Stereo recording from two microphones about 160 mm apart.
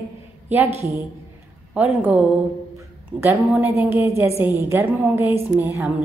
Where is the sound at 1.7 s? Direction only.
10° right (ahead or behind).